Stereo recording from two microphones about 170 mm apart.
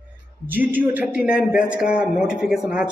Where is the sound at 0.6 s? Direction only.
10° right (ahead or behind).